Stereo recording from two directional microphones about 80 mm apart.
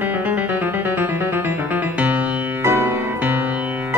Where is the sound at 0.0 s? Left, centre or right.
Right.